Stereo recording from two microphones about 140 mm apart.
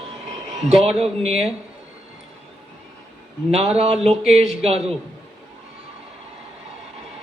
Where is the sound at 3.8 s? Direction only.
45° right (ahead or behind).